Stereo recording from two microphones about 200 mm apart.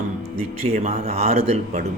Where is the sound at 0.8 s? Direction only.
35° right (ahead or behind).